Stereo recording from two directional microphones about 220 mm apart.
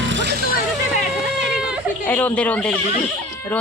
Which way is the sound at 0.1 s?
50° right (ahead or behind).